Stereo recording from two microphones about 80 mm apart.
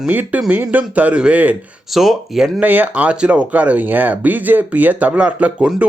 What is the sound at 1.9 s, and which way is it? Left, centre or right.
Speech, centre.